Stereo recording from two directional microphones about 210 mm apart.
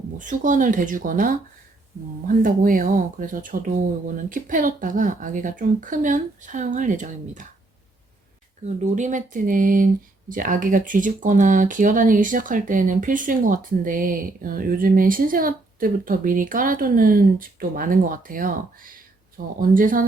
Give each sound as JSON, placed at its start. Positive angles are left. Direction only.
{"t": 0.2, "sound": "speech", "side_deg": -35}
{"t": 8.6, "sound": "speech", "side_deg": -35}